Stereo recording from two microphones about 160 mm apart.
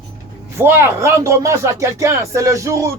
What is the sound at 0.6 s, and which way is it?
Speech, 15° right (ahead or behind).